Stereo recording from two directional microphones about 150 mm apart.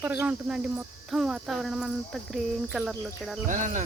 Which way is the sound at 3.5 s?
55° right (ahead or behind).